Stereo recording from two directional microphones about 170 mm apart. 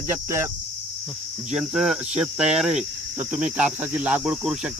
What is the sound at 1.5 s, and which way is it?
Cricket, 5° right (ahead or behind).